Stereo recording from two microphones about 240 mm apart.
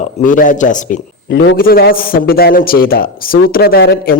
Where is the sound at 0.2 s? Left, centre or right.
Left.